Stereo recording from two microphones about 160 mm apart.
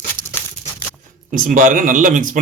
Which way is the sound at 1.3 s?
55° right (ahead or behind).